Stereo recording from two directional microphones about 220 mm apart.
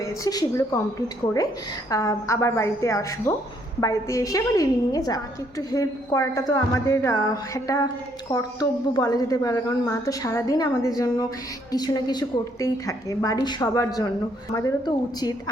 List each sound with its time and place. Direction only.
0.0 s a woman's voice: 15° left (ahead or behind)